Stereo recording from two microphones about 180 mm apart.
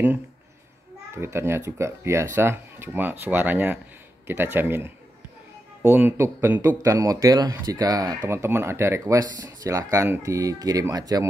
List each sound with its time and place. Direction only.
1.1 s speech: 15° right (ahead or behind)